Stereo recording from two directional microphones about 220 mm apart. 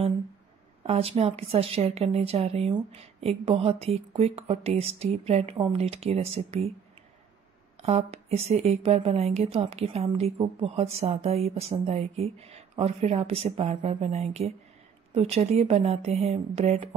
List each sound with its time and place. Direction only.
0.8 s a woman's voice: 25° right (ahead or behind)
7.8 s a woman's voice: 30° right (ahead or behind)